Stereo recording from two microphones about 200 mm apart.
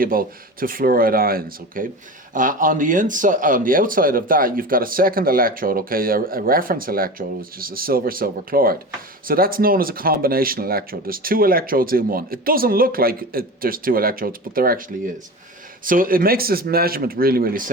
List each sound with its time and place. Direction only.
0.0 s speech: 45° right (ahead or behind)